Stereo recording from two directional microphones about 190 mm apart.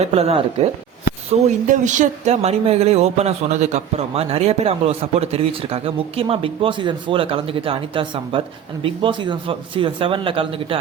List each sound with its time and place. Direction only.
0.0 s speech: 30° right (ahead or behind)
1.6 s a man's voice: 40° right (ahead or behind)